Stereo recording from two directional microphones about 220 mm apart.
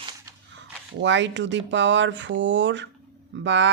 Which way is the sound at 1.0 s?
55° right (ahead or behind).